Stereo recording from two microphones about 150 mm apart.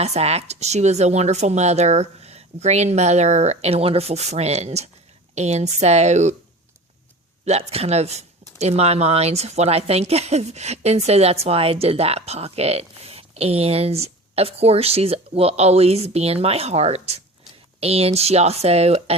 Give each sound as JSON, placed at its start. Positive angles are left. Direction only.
{"t": 0.0, "sound": "speech", "side_deg": -45}
{"t": 7.4, "sound": "speech", "side_deg": -45}